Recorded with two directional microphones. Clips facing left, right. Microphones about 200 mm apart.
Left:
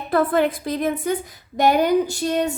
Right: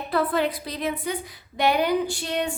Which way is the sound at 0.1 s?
50° left (ahead or behind).